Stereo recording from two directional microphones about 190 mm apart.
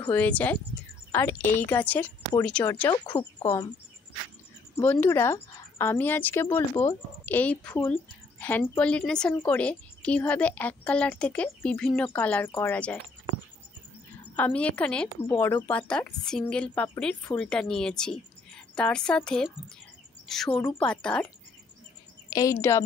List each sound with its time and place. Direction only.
0.1 s a woman's voice: 5° left (ahead or behind)
2.9 s speech: 25° left (ahead or behind)
4.7 s a woman's voice: 10° left (ahead or behind)
14.3 s a woman's voice: 10° left (ahead or behind)
22.3 s a woman's voice: 15° left (ahead or behind)